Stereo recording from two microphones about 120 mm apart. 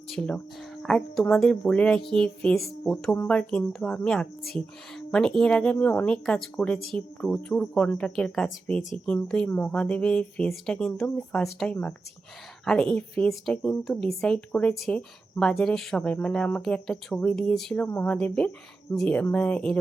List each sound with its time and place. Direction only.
0.1 s speech: 5° left (ahead or behind)
17.8 s a woman's voice: 20° left (ahead or behind)
18.1 s speech: 10° left (ahead or behind)